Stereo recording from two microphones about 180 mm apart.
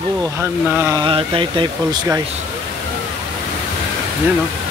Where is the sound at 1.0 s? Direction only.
25° right (ahead or behind).